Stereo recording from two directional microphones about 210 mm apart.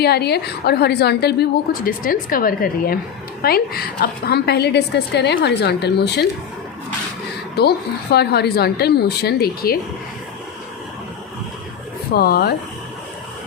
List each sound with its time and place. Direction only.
0.0 s a woman's voice: 50° left (ahead or behind)
7.6 s a woman's voice: 50° left (ahead or behind)
12.1 s a woman's voice: 50° left (ahead or behind)